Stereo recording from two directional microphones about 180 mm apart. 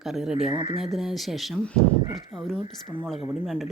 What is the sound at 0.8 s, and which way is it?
Speech, centre (ahead or behind).